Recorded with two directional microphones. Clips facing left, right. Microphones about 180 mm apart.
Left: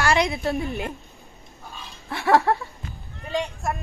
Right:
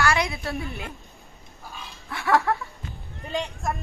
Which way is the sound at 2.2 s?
35° left (ahead or behind).